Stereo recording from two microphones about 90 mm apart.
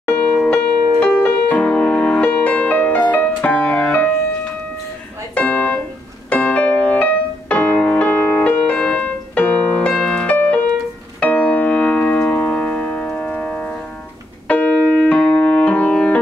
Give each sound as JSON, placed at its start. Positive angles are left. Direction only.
{"t": 0.4, "sound": "music", "side_deg": 15}
{"t": 5.3, "sound": "music", "side_deg": 15}
{"t": 11.1, "sound": "piano", "side_deg": 15}